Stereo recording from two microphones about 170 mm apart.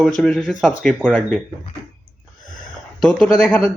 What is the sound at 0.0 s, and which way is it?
A man's voice, 5° left (ahead or behind).